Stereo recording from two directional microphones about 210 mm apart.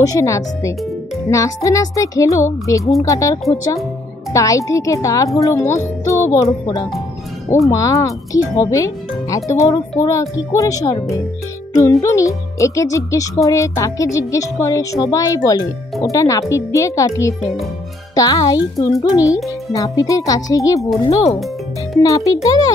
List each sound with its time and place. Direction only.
0.0 s speech: 15° left (ahead or behind)
22.0 s speech: 15° left (ahead or behind)